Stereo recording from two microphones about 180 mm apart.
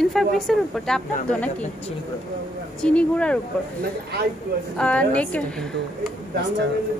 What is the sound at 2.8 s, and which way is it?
Speech, 5° left (ahead or behind).